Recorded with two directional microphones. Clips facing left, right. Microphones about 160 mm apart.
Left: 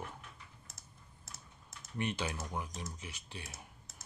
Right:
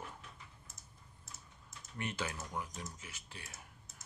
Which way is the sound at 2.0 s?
20° left (ahead or behind).